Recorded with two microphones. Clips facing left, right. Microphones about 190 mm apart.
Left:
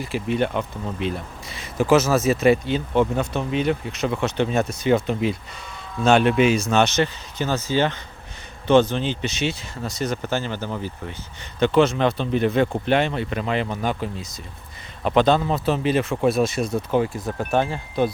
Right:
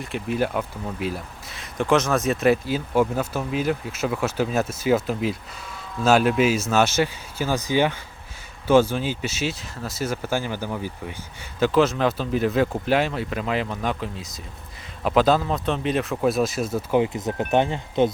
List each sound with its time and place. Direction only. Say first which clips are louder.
0.0 s speech: left 2 dB; centre (ahead or behind)
17.0 s speech: right 1 dB; 20° right (ahead or behind)